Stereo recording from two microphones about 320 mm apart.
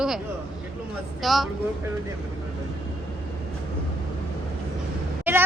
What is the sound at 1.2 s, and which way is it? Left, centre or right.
Speech, centre.